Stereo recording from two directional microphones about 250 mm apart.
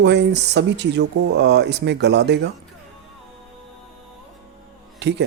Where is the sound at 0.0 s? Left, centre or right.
Right.